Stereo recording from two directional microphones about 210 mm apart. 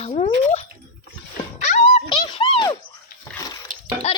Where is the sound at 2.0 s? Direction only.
25° left (ahead or behind).